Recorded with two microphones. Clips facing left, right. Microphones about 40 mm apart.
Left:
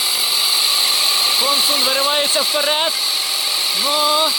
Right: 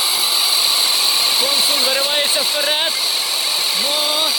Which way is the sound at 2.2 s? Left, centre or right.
Centre.